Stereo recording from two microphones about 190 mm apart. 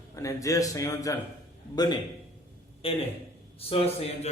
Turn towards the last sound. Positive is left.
turn(degrees=30)  # may be behind; listen again after turning